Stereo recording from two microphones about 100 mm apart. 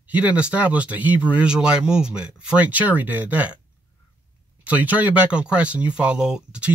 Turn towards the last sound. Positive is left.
turn(degrees=-10)  # may be behind; listen again after turning